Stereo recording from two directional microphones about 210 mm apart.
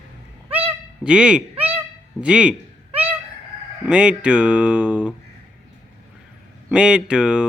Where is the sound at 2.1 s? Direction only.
5° right (ahead or behind).